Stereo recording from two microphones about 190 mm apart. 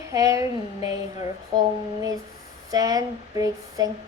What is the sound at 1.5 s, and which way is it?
Speech, 20° right (ahead or behind).